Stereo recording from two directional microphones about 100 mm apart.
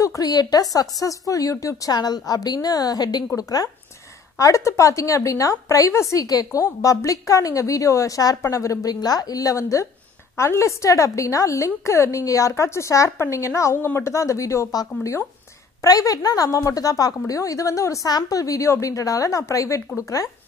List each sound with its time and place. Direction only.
0.0 s a woman's voice: 35° left (ahead or behind)